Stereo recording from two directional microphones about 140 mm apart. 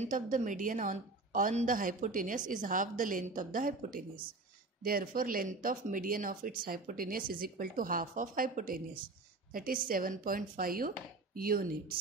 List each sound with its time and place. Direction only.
0.0 s a woman's voice: 70° right (ahead or behind); by 11.6 s 90° right